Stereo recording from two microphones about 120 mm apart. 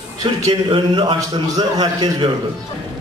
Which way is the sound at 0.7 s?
45° right (ahead or behind).